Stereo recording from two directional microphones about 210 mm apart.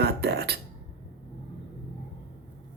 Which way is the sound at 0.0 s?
50° right (ahead or behind).